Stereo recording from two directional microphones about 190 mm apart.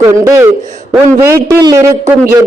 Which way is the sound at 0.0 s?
15° right (ahead or behind).